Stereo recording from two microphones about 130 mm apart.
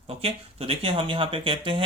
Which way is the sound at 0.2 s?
45° right (ahead or behind).